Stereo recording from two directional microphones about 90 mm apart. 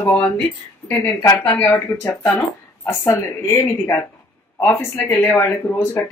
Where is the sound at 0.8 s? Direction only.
20° left (ahead or behind).